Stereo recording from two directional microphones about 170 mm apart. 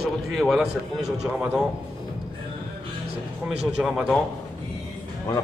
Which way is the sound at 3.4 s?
5° right (ahead or behind).